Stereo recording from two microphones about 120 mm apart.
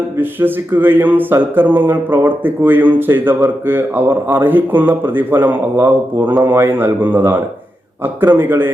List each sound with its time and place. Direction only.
0.2 s speech: 15° right (ahead or behind)